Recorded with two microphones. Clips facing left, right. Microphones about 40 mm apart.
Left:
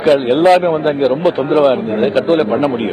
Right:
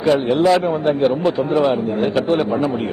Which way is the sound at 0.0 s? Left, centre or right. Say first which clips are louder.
Left 5 dB; left.